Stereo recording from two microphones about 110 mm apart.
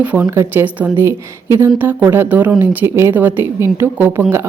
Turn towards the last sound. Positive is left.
turn(degrees=-20)  # may be behind; listen again after turning